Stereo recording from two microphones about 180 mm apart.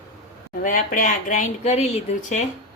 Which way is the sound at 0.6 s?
50° left (ahead or behind).